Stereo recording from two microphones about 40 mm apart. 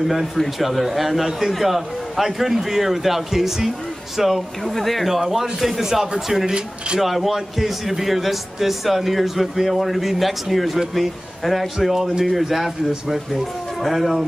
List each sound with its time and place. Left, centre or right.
0.4 s a man's voice: centre
6.4 s speech: right
7.0 s a man's voice: centre